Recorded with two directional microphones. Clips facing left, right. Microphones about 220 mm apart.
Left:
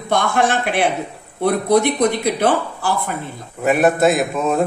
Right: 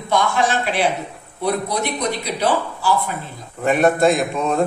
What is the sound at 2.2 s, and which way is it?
Speech, 55° left (ahead or behind).